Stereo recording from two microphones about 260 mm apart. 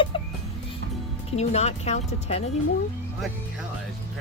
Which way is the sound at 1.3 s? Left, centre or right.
Left.